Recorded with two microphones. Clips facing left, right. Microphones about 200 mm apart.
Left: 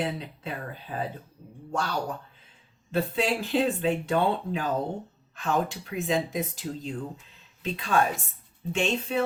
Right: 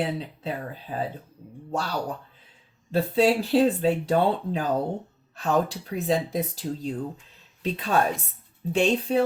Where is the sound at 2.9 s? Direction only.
35° right (ahead or behind).